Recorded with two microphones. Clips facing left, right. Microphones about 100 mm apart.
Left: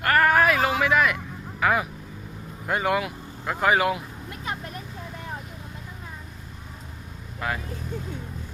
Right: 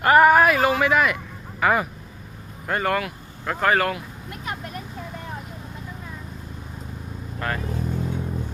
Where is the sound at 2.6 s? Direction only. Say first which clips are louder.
Right 1 dB; 10° left (ahead or behind).